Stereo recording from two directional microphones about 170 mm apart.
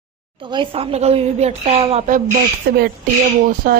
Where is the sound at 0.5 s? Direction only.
35° right (ahead or behind).